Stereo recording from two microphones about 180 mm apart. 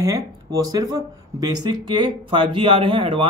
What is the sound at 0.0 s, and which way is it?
Speech, 20° right (ahead or behind).